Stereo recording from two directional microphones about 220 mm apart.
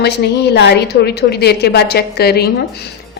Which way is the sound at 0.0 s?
50° left (ahead or behind).